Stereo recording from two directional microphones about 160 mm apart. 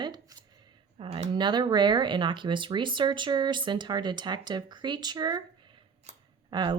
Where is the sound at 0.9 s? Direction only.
35° right (ahead or behind).